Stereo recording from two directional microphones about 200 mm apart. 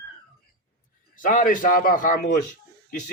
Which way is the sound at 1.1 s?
40° left (ahead or behind).